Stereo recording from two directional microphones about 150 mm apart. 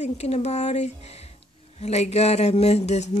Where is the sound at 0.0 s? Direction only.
45° left (ahead or behind).